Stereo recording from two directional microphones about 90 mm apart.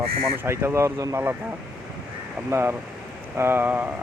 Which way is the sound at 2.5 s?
30° right (ahead or behind).